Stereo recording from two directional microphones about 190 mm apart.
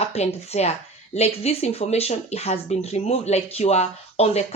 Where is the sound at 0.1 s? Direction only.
35° left (ahead or behind).